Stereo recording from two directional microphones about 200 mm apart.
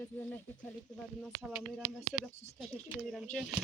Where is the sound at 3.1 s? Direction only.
5° left (ahead or behind).